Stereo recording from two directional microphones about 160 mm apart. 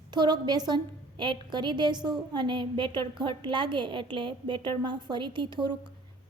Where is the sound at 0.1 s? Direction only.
25° right (ahead or behind).